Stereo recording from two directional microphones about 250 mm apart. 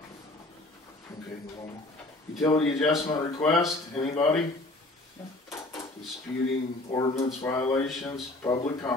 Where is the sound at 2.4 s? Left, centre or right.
Centre.